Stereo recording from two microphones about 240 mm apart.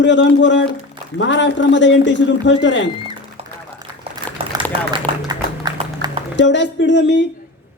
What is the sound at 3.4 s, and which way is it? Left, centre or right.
Duck, right.